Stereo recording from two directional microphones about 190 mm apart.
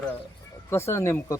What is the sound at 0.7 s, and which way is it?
Speech, 15° left (ahead or behind).